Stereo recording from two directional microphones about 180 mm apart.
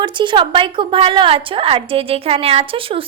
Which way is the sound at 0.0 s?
25° right (ahead or behind).